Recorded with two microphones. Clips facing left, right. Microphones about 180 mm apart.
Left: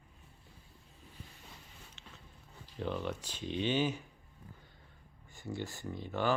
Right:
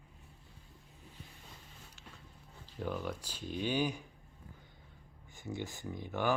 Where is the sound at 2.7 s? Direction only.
5° right (ahead or behind).